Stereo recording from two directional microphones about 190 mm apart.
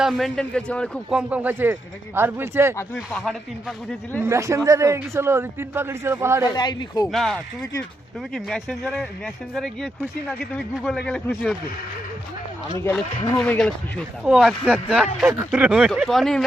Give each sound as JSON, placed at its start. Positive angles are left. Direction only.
{"t": 0.0, "sound": "speech", "side_deg": 0}
{"t": 1.1, "sound": "a man's voice", "side_deg": -5}
{"t": 2.7, "sound": "speech", "side_deg": 5}
{"t": 4.2, "sound": "a man's voice", "side_deg": -15}
{"t": 6.5, "sound": "a man's voice", "side_deg": 25}
{"t": 7.1, "sound": "speech", "side_deg": 0}
{"t": 13.4, "sound": "speech", "side_deg": 5}